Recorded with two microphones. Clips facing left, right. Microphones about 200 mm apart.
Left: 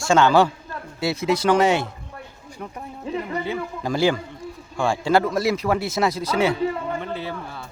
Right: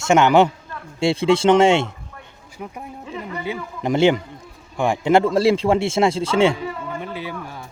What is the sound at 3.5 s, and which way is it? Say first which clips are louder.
Speech: right 2 dB; 20° right (ahead or behind).